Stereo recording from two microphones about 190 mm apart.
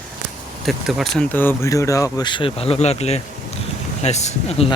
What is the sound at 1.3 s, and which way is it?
Speech, 10° left (ahead or behind).